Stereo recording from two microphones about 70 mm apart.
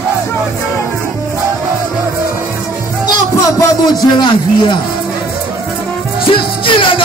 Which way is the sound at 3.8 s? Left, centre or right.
Left.